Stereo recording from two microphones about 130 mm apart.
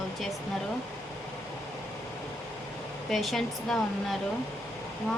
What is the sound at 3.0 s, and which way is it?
Speech, centre (ahead or behind).